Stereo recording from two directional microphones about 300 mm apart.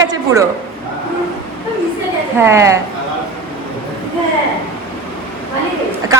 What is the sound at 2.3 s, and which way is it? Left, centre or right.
Speech, centre.